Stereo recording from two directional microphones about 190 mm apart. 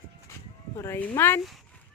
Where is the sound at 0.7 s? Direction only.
15° left (ahead or behind).